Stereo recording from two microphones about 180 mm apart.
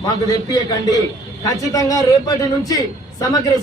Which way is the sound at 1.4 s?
20° left (ahead or behind).